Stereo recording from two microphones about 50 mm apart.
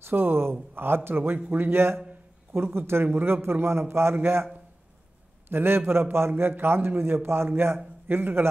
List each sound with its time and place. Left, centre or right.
0.0 s a man's voice: right
5.5 s a man's voice: right